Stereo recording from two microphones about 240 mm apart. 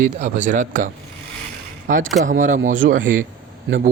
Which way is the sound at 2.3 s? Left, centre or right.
Right.